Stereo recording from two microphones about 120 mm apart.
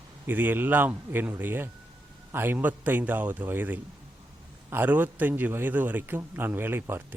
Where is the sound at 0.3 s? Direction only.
15° right (ahead or behind).